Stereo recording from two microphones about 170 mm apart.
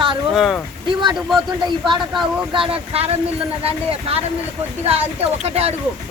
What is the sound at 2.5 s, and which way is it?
Speech, 30° right (ahead or behind).